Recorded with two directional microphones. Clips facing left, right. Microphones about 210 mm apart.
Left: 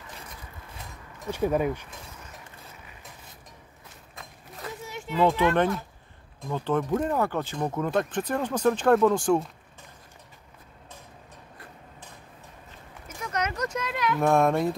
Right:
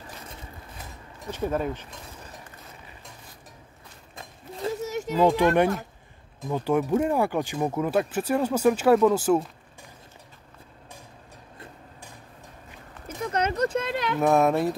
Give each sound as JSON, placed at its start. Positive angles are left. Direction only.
{"t": 1.2, "sound": "speech", "side_deg": 10}
{"t": 4.2, "sound": "mechanisms", "side_deg": -25}
{"t": 4.8, "sound": "a sound", "side_deg": -40}
{"t": 6.5, "sound": "speech", "side_deg": -10}
{"t": 13.2, "sound": "a sound", "side_deg": -30}
{"t": 14.2, "sound": "speech", "side_deg": 0}